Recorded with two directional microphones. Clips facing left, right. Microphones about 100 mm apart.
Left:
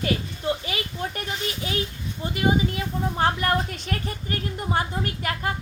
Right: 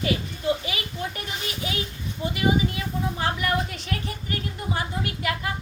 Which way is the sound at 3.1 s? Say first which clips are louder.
Left 4 dB; 45° left (ahead or behind).